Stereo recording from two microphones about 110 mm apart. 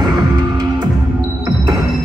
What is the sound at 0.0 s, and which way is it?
Music, 40° right (ahead or behind).